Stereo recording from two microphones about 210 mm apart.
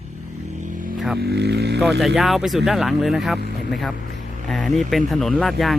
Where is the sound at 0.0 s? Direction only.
35° right (ahead or behind).